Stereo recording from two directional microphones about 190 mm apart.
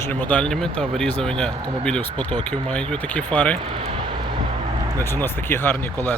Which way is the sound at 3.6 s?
30° right (ahead or behind).